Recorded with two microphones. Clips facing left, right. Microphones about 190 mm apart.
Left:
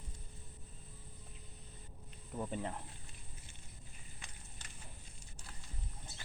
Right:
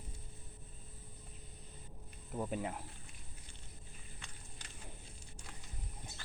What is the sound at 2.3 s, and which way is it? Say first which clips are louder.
Speech: right 2 dB; 10° right (ahead or behind).